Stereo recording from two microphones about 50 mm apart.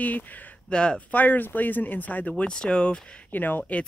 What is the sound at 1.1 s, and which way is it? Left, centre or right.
Speech, left.